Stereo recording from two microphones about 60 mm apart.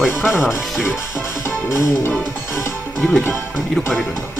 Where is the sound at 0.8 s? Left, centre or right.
Left.